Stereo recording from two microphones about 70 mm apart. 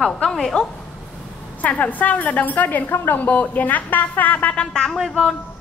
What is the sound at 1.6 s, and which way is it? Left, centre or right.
A woman's voice, left.